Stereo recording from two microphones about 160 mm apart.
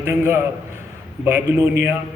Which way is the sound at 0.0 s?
15° right (ahead or behind).